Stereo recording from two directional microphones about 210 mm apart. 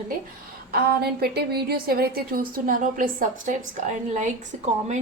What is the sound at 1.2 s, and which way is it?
A woman's voice, 50° right (ahead or behind).